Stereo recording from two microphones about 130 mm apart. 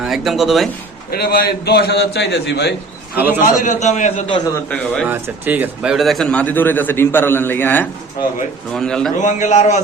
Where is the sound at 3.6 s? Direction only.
70° left (ahead or behind).